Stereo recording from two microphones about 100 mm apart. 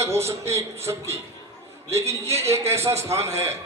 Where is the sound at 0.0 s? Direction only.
25° right (ahead or behind).